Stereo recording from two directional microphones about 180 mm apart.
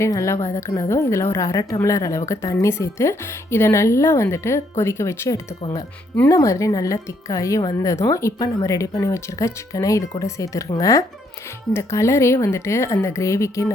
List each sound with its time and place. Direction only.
0.0 s speech: 15° left (ahead or behind)